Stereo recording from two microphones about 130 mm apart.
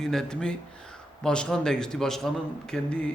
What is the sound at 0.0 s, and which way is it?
A man's voice, 5° left (ahead or behind).